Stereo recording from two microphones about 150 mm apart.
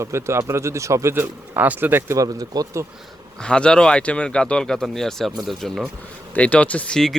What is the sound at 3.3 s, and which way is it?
Speech, 5° left (ahead or behind).